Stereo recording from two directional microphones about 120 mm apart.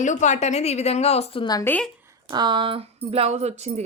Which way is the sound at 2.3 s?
40° right (ahead or behind).